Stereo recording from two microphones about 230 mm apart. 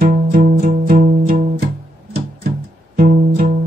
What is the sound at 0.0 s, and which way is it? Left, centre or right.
Music, right.